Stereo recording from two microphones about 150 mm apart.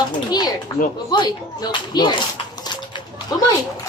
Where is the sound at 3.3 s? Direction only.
25° left (ahead or behind).